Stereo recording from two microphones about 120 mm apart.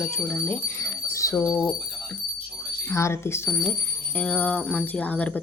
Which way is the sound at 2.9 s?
25° left (ahead or behind).